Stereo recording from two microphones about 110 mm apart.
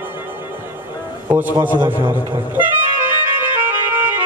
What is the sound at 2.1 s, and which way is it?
Speech, 15° right (ahead or behind).